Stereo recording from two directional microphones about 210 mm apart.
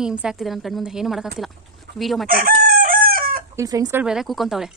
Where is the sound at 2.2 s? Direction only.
45° right (ahead or behind).